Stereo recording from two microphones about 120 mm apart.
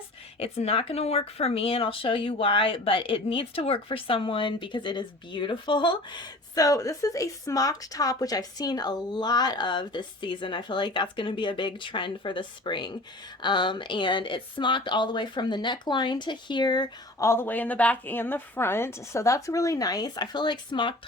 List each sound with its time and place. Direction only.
0.3 s speech: 55° left (ahead or behind); by 16.9 s 40° left (ahead or behind)
17.2 s a woman's voice: 20° left (ahead or behind); by 20.9 s 40° left (ahead or behind)